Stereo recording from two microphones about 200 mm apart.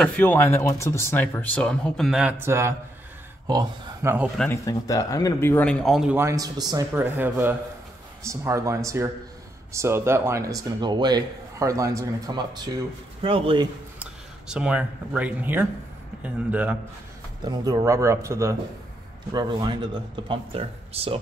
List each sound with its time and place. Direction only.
0.0 s speech: 10° left (ahead or behind); by 4.3 s 10° right (ahead or behind)
4.4 s speech: 15° left (ahead or behind); by 13.7 s 25° right (ahead or behind)
14.5 s speech: 5° right (ahead or behind)
17.5 s speech: 20° right (ahead or behind)